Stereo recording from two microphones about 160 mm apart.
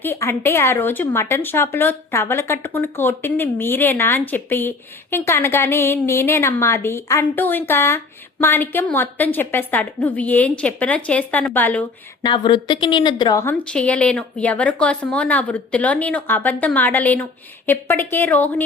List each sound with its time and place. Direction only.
0.0 s a woman's voice: 15° left (ahead or behind)
12.2 s a woman's voice: 25° left (ahead or behind)
13.4 s a woman's voice: 10° left (ahead or behind)